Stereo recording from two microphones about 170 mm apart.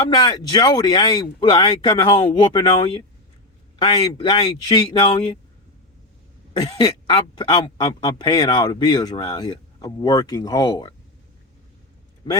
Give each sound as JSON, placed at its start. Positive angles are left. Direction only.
{"t": 0.1, "sound": "speech", "side_deg": 25}
{"t": 6.5, "sound": "speech", "side_deg": 25}